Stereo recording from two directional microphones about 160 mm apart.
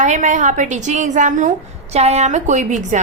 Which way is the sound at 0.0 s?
50° right (ahead or behind).